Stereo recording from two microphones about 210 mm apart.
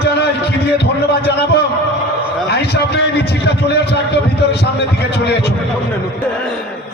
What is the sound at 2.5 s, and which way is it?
Speech, 50° left (ahead or behind).